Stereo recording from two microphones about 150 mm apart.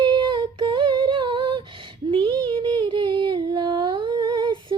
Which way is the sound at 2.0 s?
35° right (ahead or behind).